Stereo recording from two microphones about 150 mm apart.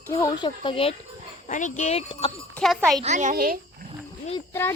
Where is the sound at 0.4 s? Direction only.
35° left (ahead or behind).